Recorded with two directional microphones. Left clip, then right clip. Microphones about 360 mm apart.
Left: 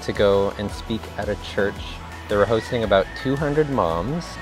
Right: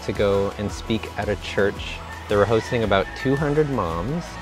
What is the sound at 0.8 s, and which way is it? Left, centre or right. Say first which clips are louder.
Speech: right 3 dB; centre.